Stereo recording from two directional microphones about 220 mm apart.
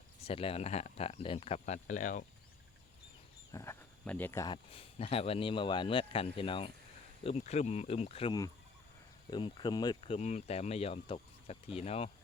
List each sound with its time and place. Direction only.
0.2 s speech: 25° left (ahead or behind)
3.5 s speech: 10° left (ahead or behind); by 12.1 s 30° left (ahead or behind)